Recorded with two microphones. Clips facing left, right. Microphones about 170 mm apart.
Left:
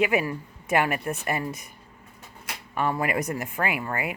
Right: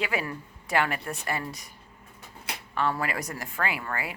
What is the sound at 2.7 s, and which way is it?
Speech, 15° left (ahead or behind).